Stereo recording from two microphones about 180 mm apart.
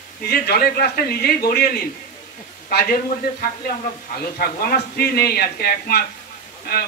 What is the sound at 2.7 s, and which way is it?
A man's voice, 55° left (ahead or behind).